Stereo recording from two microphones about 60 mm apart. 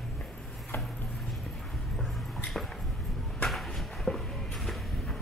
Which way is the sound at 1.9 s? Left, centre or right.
Centre.